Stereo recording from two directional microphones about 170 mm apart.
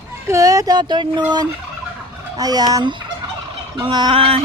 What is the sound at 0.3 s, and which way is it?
Speech, 20° right (ahead or behind).